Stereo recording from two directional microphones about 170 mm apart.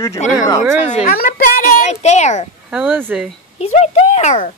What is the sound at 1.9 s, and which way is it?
Speech, 40° left (ahead or behind).